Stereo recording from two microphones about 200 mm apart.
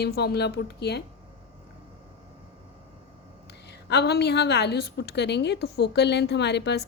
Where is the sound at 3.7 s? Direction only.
55° left (ahead or behind).